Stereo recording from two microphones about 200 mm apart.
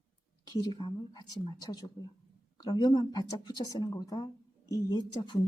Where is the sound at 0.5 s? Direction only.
20° left (ahead or behind).